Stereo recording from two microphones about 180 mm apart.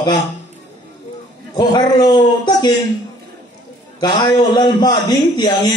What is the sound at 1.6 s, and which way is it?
A man's voice, 25° left (ahead or behind).